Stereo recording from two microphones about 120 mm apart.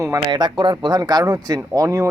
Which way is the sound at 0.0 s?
30° right (ahead or behind).